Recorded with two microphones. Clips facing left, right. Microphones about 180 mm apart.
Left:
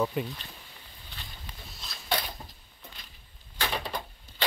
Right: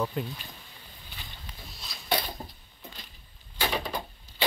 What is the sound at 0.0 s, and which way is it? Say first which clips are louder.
Speech: left 2 dB; 5° left (ahead or behind).